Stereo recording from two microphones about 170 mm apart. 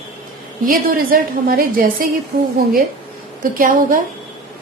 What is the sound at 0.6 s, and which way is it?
A woman's voice, 55° right (ahead or behind).